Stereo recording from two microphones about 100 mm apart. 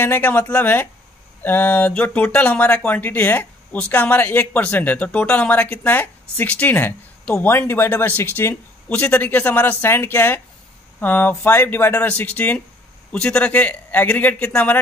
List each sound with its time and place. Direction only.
0.0 s speech: 20° left (ahead or behind)